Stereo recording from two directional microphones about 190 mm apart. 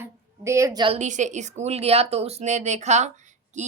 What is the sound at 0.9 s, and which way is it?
A woman's voice, 40° right (ahead or behind).